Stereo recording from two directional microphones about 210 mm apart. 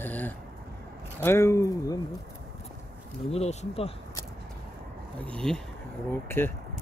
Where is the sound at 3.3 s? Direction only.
30° left (ahead or behind).